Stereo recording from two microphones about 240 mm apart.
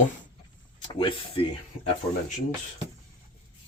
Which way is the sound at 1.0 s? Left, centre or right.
Left.